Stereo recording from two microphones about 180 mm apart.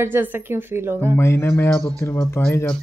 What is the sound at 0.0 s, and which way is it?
A woman's voice, 10° right (ahead or behind).